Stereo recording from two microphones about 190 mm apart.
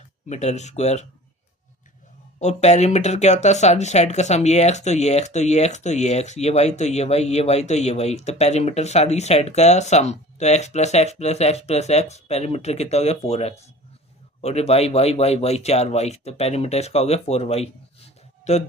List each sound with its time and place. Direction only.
0.3 s speech: 35° left (ahead or behind)
2.4 s speech: 35° left (ahead or behind)